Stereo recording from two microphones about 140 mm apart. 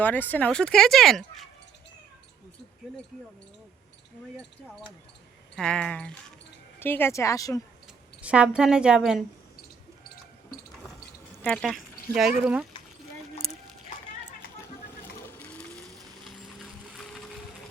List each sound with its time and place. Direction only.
0.0 s speech: 10° left (ahead or behind)
5.5 s speech: 5° left (ahead or behind); by 7.6 s 25° left (ahead or behind)
8.2 s a woman's voice: 10° right (ahead or behind)
11.4 s speech: 5° left (ahead or behind)
15.0 s a sound: 10° left (ahead or behind)
16.9 s music: 5° left (ahead or behind)